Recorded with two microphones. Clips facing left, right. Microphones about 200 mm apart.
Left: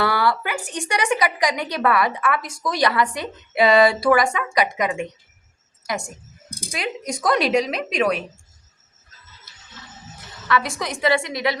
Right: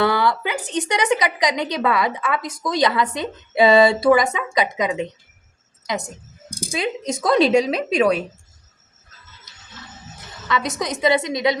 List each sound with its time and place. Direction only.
0.0 s a woman's voice: 20° right (ahead or behind)
10.5 s speech: 20° right (ahead or behind)